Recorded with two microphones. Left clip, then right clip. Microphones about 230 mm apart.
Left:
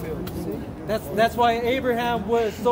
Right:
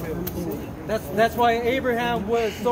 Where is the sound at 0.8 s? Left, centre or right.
Centre.